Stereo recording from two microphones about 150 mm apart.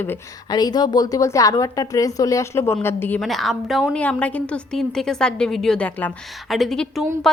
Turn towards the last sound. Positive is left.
turn(degrees=5)  # may be behind; listen again after turning